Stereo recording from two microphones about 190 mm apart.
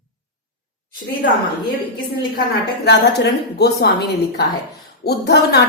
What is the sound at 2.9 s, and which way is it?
A woman's voice, 60° left (ahead or behind).